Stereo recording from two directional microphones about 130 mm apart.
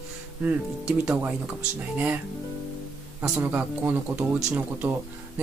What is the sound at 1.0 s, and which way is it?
Speech, 10° right (ahead or behind).